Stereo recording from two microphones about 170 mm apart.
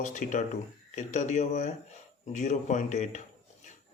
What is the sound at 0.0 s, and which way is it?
A man's voice, 45° left (ahead or behind).